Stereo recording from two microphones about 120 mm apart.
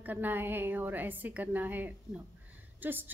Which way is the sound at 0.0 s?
15° right (ahead or behind).